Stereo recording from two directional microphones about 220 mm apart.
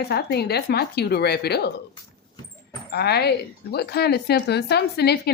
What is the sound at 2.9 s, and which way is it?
A woman's voice, 45° left (ahead or behind).